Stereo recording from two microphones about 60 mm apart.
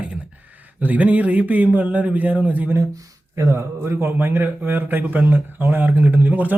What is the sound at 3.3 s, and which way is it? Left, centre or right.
A man's voice, right.